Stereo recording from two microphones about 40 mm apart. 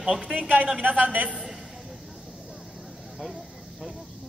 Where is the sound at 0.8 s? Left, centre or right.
Right.